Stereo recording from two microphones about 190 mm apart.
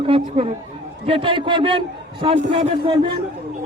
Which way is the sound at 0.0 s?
30° right (ahead or behind).